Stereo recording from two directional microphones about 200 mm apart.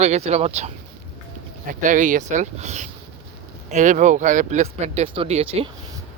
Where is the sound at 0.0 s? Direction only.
30° right (ahead or behind).